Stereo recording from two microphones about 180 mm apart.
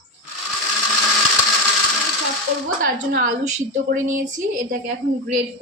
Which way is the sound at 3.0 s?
50° right (ahead or behind).